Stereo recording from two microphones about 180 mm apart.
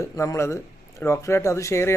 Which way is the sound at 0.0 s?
15° left (ahead or behind).